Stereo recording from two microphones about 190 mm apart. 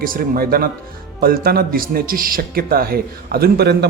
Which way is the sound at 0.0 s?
50° right (ahead or behind).